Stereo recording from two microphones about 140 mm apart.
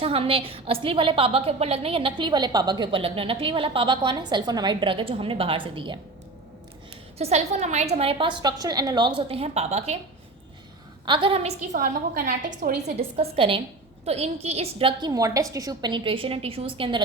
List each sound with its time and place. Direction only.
0.0 s a woman's voice: 40° right (ahead or behind)
7.2 s a woman's voice: 50° right (ahead or behind)
11.0 s a woman's voice: 35° right (ahead or behind)
11.8 s a woman's voice: 80° right
13.0 s a woman's voice: 40° right (ahead or behind)
15.1 s a woman's voice: 25° right (ahead or behind); by 17.0 s 40° right (ahead or behind)